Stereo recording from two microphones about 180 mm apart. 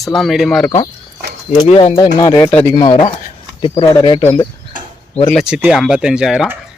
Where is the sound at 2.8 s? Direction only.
25° left (ahead or behind).